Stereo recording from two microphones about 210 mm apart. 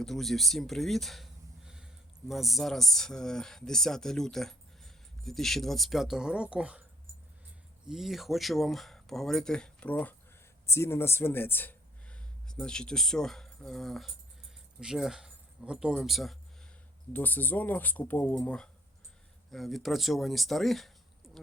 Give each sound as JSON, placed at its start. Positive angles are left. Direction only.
{"t": 0.0, "sound": "speech", "side_deg": 0}
{"t": 7.9, "sound": "speech", "side_deg": 0}